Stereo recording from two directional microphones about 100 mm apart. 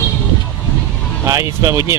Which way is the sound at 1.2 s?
30° right (ahead or behind).